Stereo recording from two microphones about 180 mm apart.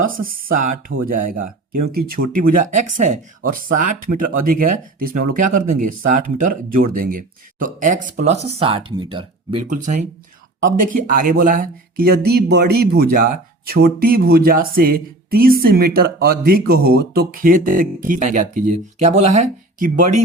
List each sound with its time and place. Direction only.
0.0 s speech: 50° right (ahead or behind); by 9.6 s 30° right (ahead or behind)
9.6 s speech: 45° right (ahead or behind)